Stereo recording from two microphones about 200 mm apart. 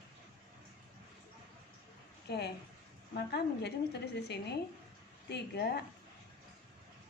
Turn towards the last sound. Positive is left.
turn(degrees=55)  # may be behind; listen again after turning